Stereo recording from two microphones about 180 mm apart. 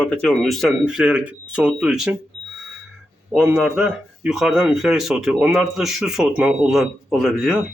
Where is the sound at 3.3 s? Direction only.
Centre (ahead or behind).